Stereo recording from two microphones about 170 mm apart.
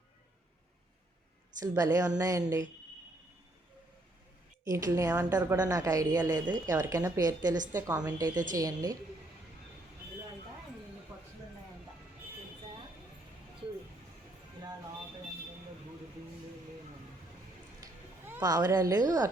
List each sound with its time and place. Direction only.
1.6 s a woman's voice: 20° right (ahead or behind)
4.6 s a woman's voice: 20° right (ahead or behind)
11.1 s a sound: 15° right (ahead or behind)
18.4 s a woman's voice: 20° right (ahead or behind)